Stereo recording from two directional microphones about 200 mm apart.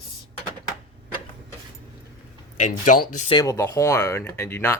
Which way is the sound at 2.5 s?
35° left (ahead or behind).